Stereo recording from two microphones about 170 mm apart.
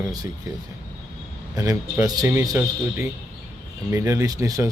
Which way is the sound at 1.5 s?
15° right (ahead or behind).